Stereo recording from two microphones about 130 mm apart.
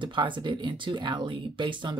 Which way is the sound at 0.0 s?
40° right (ahead or behind).